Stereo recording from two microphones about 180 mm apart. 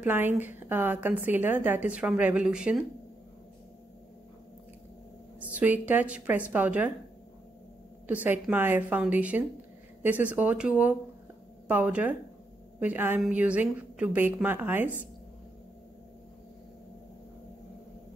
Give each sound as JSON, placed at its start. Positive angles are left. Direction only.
{"t": 0.0, "sound": "a woman's voice", "side_deg": -10}
{"t": 5.5, "sound": "a woman's voice", "side_deg": -10}
{"t": 8.1, "sound": "a woman's voice", "side_deg": -10}